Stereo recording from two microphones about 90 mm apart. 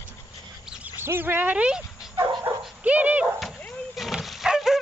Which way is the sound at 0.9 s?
25° right (ahead or behind).